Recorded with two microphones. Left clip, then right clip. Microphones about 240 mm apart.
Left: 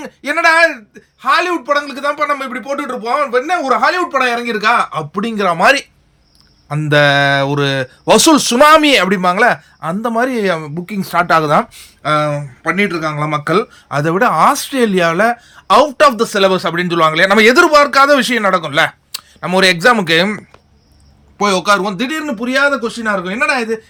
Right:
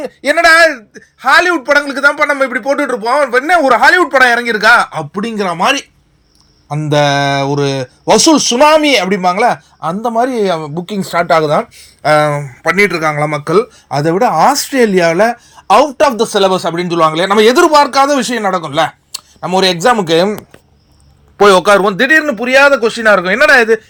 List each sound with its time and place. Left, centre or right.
0.2 s speech: centre
12.0 s speech: centre
13.2 s speech: centre
16.2 s speech: left
16.5 s speech: centre
21.3 s speech: centre